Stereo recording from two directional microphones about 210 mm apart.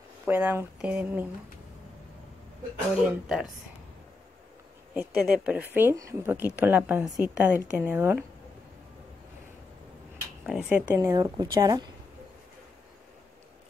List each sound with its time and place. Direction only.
0.3 s speech: 10° right (ahead or behind)
3.0 s speech: 5° right (ahead or behind)
4.9 s speech: 5° right (ahead or behind)
10.4 s speech: 5° right (ahead or behind)